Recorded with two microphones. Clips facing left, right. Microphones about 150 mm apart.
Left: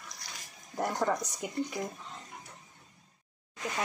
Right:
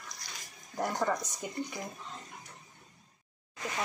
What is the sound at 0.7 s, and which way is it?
Speech, 5° left (ahead or behind).